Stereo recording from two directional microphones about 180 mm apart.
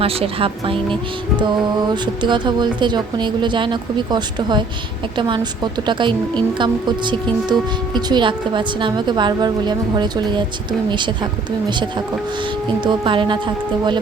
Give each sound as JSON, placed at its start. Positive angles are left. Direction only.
{"t": 0.0, "sound": "speech", "side_deg": -30}
{"t": 1.9, "sound": "a woman's voice", "side_deg": -25}